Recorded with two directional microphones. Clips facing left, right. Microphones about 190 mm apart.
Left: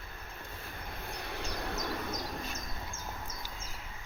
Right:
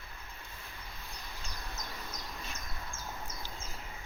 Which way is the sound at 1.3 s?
80° left.